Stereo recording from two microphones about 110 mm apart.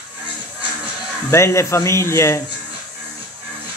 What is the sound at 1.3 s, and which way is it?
Speech, 25° left (ahead or behind).